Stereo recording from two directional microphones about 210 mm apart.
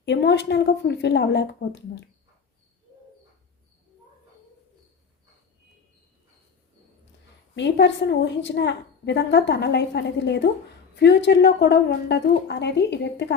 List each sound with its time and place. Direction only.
0.0 s a woman's voice: 55° left (ahead or behind)
7.5 s a woman's voice: 55° left (ahead or behind)